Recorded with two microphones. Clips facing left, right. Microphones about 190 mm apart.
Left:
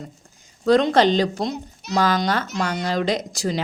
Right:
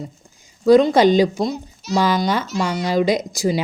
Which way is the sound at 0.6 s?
5° right (ahead or behind).